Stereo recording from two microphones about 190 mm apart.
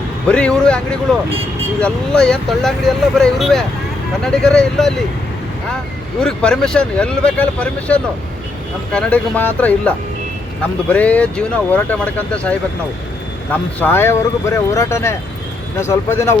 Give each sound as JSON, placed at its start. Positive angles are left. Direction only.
{"t": 0.3, "sound": "speech", "side_deg": 5}
{"t": 6.1, "sound": "speech", "side_deg": 5}